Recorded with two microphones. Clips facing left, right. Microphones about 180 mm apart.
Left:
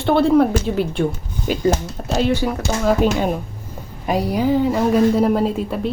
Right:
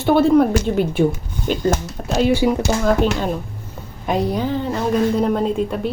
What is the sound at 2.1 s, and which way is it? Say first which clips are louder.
Speech: right 3 dB; 10° right (ahead or behind).